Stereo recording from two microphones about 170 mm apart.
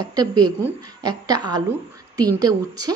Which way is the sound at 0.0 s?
20° right (ahead or behind).